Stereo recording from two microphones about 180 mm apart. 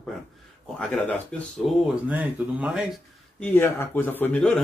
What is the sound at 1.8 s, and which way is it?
Speech, 10° right (ahead or behind).